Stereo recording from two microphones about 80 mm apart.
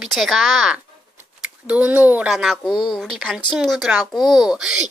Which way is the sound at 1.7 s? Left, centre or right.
Centre.